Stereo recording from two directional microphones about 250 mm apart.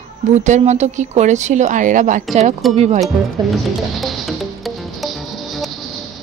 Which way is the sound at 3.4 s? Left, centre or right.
Centre.